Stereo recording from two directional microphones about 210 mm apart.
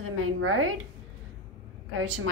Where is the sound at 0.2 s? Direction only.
75° right (ahead or behind).